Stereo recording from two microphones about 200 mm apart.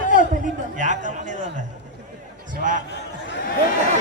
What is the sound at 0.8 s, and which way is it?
Speech, 40° right (ahead or behind).